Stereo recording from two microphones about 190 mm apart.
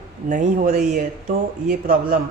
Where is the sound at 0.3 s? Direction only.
45° right (ahead or behind).